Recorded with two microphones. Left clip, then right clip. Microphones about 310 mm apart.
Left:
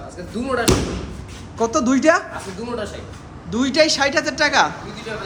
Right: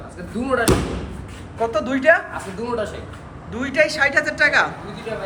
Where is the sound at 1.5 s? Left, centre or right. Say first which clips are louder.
Left 2 dB; left.